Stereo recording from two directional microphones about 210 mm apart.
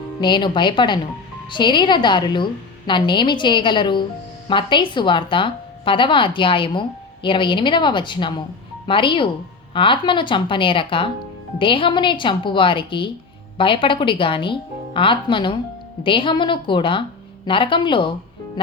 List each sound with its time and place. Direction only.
0.2 s a woman's voice: 20° left (ahead or behind)